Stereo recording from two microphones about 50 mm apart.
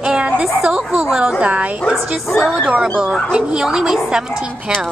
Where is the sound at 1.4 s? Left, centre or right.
Right.